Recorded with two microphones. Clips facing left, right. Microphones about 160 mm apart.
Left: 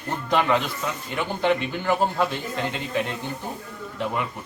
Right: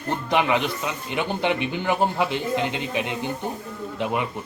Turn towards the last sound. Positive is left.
turn(degrees=-20)  # may be behind; listen again after turning